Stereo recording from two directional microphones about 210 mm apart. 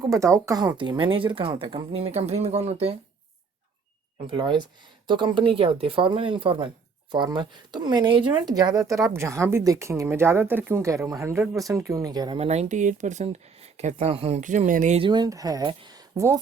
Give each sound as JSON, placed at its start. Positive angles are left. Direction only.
{"t": 0.1, "sound": "speech", "side_deg": -15}
{"t": 4.3, "sound": "speech", "side_deg": -25}
{"t": 12.4, "sound": "speech", "side_deg": -30}
{"t": 15.0, "sound": "speech", "side_deg": -20}